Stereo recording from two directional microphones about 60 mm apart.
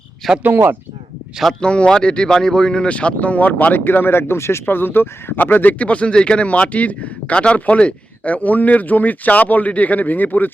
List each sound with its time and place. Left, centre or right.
0.4 s speech: right
1.6 s speech: centre; by 4.6 s left
4.6 s speech: left
5.8 s speech: left